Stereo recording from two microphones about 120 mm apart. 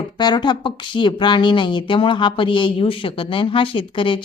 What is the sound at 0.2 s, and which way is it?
A woman's voice, 35° left (ahead or behind).